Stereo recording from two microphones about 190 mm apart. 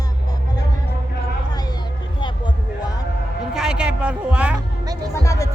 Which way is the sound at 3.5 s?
5° right (ahead or behind).